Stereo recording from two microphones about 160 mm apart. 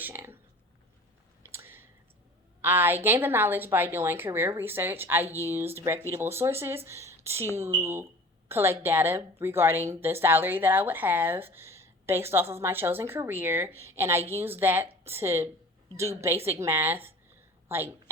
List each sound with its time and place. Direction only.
0.0 s speech: 10° right (ahead or behind)
1.5 s a sound: 15° right (ahead or behind)
2.6 s a woman's voice: 15° right (ahead or behind)